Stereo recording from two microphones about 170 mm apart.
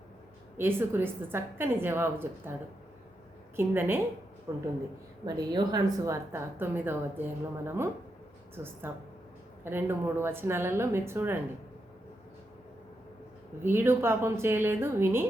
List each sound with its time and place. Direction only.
0.5 s a woman's voice: 15° right (ahead or behind)
8.5 s a woman's voice: 15° right (ahead or behind)
13.6 s a woman's voice: 15° right (ahead or behind)